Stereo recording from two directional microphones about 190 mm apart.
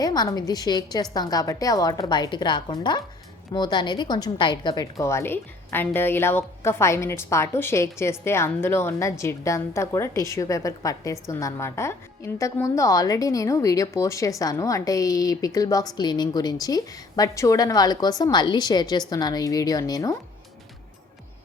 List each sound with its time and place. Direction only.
0.0 s a woman's voice: 20° left (ahead or behind)